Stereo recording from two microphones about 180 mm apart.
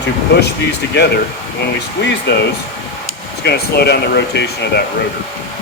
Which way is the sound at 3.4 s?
65° left (ahead or behind).